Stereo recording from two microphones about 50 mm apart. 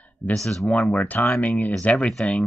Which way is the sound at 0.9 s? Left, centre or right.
Left.